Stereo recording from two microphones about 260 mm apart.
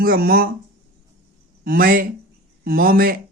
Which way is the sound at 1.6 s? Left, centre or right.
Right.